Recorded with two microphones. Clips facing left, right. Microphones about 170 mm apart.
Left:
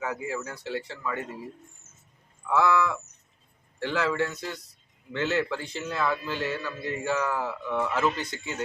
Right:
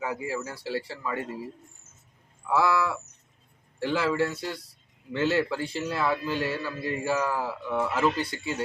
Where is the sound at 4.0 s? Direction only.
5° right (ahead or behind).